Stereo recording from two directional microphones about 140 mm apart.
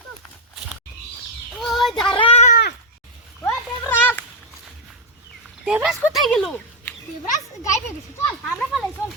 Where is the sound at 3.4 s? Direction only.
15° left (ahead or behind).